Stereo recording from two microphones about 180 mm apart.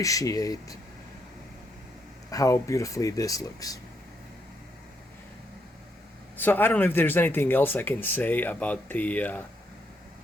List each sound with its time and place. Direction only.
0.0 s speech: 20° left (ahead or behind)
2.3 s speech: 20° left (ahead or behind)
6.3 s speech: 10° left (ahead or behind)